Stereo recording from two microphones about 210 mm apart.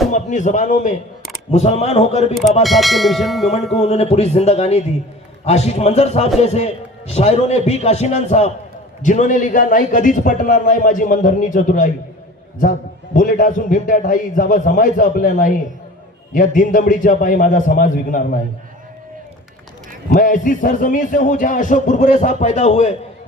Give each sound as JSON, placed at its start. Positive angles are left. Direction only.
{"t": 0.1, "sound": "a man's voice", "side_deg": 35}
{"t": 2.6, "sound": "church bell", "side_deg": 0}
{"t": 3.8, "sound": "a man's voice", "side_deg": 30}
{"t": 13.1, "sound": "a man's voice", "side_deg": 40}
{"t": 16.6, "sound": "a man's voice", "side_deg": 40}
{"t": 20.1, "sound": "a man's voice", "side_deg": 40}